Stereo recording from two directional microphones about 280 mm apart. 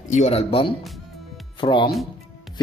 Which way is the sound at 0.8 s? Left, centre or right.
Centre.